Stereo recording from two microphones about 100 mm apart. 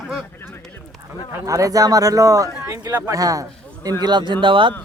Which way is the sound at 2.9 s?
20° right (ahead or behind).